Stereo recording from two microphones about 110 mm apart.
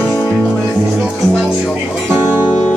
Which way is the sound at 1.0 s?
5° right (ahead or behind).